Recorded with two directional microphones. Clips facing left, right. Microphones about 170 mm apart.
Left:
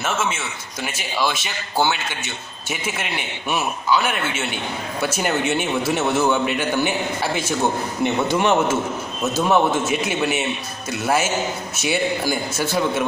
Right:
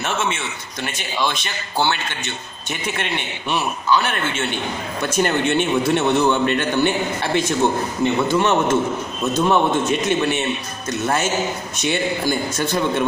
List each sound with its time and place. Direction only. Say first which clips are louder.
0.0 s a man's voice: right 1 dB; centre (ahead or behind)